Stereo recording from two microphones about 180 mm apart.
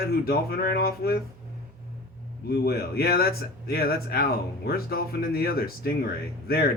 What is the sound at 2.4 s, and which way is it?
A man's voice, 60° left (ahead or behind).